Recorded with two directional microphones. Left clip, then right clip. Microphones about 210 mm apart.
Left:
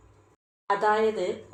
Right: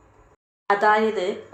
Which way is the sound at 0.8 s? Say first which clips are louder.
Right 4 dB; 25° right (ahead or behind).